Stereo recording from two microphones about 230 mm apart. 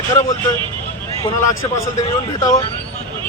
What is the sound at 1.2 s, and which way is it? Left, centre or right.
Speech, centre.